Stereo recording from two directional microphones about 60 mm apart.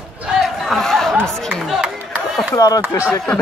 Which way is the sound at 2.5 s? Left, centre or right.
Left.